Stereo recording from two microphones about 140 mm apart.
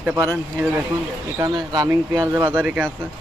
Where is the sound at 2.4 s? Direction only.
15° right (ahead or behind).